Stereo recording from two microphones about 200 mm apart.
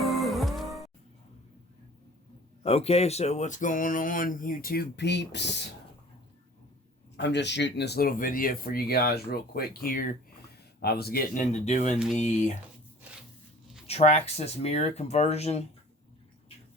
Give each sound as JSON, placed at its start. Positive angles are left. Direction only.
{"t": 0.0, "sound": "music", "side_deg": 0}
{"t": 2.6, "sound": "speech", "side_deg": 30}
{"t": 7.2, "sound": "speech", "side_deg": 60}
{"t": 11.5, "sound": "speech", "side_deg": 35}
{"t": 13.8, "sound": "speech", "side_deg": 30}